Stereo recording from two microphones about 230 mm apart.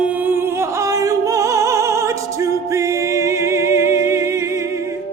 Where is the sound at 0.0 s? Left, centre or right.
Centre.